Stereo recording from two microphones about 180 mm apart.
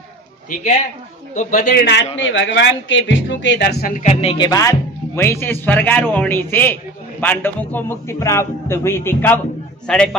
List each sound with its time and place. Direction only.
1.3 s speech: 45° left (ahead or behind); by 2.0 s 65° left (ahead or behind)
2.1 s speech: 90° left; by 3.9 s 65° left (ahead or behind)
3.9 s a man's voice: 40° left (ahead or behind); by 10.1 s 5° left (ahead or behind)